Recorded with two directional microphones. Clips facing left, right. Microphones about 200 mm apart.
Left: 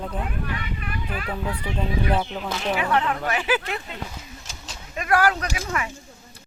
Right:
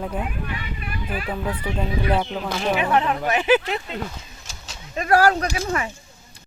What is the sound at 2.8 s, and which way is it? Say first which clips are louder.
Speech: right 2 dB; 20° right (ahead or behind).